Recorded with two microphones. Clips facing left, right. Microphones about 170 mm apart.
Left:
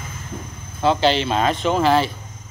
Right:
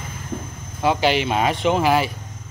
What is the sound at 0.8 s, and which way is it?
Speech, 10° right (ahead or behind).